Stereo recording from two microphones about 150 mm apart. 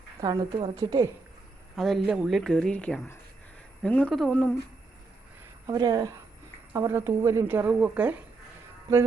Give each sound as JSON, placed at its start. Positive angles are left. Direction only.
{"t": 0.2, "sound": "a woman's voice", "side_deg": -25}
{"t": 1.7, "sound": "speech", "side_deg": 0}
{"t": 5.6, "sound": "a woman's voice", "side_deg": -25}